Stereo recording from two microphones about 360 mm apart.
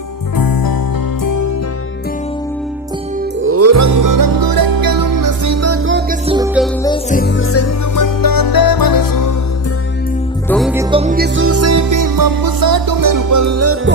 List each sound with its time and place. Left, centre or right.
0.3 s music: left
1.2 s music: left
3.4 s music: right
6.2 s music: centre
6.8 s music: centre
7.2 s music: left
7.9 s music: left
10.5 s music: centre
10.9 s music: right